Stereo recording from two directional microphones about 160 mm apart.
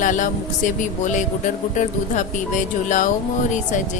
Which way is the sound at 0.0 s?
50° left (ahead or behind).